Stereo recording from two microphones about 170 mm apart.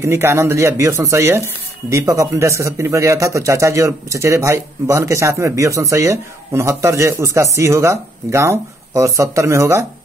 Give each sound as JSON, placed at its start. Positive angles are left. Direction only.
{"t": 0.0, "sound": "speech", "side_deg": -15}